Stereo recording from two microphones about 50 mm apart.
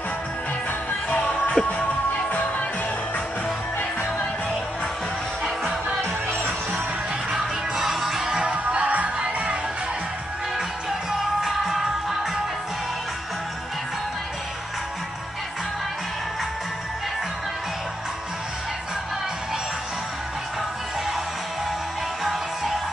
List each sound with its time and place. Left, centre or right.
1.1 s music: left
5.4 s music: centre
7.2 s music: centre
8.8 s music: right
11.1 s music: centre